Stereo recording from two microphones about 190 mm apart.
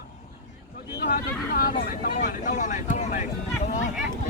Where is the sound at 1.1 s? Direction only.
50° left (ahead or behind).